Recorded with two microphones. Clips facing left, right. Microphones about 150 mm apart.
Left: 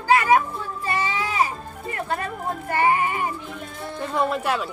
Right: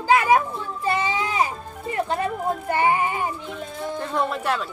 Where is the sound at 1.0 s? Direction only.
20° right (ahead or behind).